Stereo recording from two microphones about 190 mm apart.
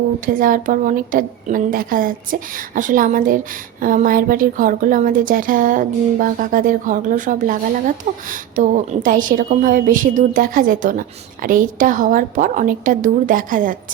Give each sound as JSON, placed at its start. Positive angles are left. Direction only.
{"t": 0.3, "sound": "a woman's voice", "side_deg": -45}